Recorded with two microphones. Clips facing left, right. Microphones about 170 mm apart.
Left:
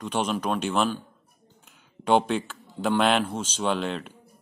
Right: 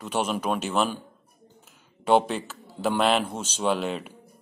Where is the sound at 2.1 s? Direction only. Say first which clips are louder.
Right 1 dB; 5° right (ahead or behind).